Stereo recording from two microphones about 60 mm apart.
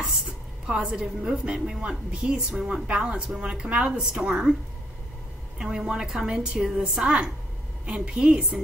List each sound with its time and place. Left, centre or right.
0.7 s a woman's voice: centre
5.6 s a woman's voice: centre